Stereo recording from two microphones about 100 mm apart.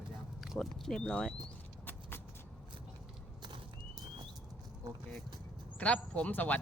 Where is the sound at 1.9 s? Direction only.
20° left (ahead or behind).